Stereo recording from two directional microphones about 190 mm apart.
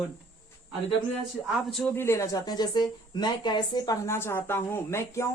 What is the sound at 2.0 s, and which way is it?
A woman's voice, 15° left (ahead or behind).